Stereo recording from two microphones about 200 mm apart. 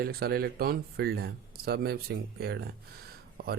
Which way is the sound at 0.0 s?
50° right (ahead or behind).